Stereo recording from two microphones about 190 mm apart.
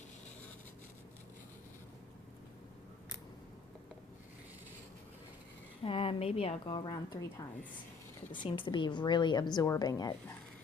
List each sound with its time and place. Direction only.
5.8 s a woman's voice: 30° left (ahead or behind)